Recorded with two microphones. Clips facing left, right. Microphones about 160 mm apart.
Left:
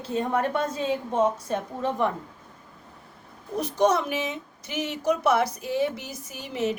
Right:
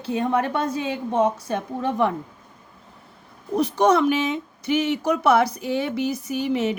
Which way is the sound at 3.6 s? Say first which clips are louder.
Right 4 dB; 65° right (ahead or behind).